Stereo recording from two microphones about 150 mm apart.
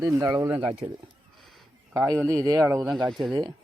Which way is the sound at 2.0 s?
10° left (ahead or behind).